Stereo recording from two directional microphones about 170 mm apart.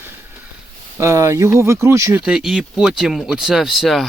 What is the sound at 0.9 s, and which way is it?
Speech, 15° right (ahead or behind).